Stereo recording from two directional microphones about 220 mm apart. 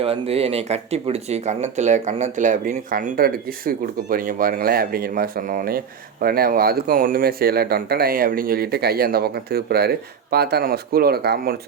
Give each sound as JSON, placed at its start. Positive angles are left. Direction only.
{"t": 0.0, "sound": "speech", "side_deg": -25}